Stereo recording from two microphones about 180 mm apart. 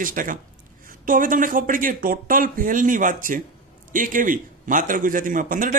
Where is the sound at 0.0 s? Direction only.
50° right (ahead or behind).